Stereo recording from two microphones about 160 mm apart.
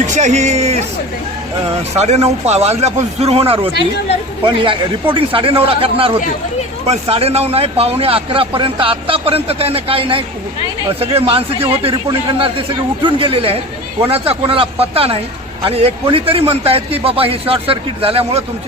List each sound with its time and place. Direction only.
0.0 s speech: 50° right (ahead or behind)
2.0 s speech: 40° right (ahead or behind)